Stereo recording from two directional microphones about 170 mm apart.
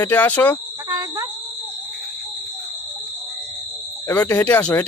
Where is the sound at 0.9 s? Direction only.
20° right (ahead or behind).